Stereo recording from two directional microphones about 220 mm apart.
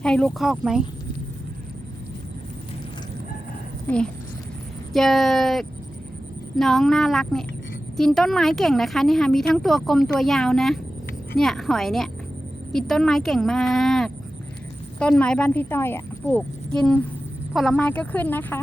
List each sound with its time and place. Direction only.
0.0 s a woman's voice: 5° left (ahead or behind)
3.8 s a woman's voice: 5° left (ahead or behind)